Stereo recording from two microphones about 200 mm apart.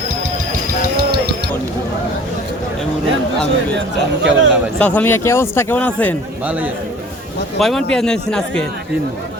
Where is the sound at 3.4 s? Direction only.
60° right (ahead or behind).